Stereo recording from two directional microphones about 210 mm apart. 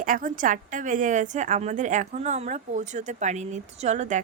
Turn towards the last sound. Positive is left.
turn(degrees=-35)  # may be behind; listen again after turning